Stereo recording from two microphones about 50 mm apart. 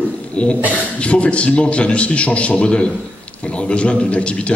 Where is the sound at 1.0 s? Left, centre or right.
Left.